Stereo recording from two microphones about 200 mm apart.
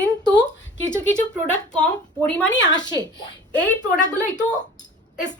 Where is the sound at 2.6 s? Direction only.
20° left (ahead or behind).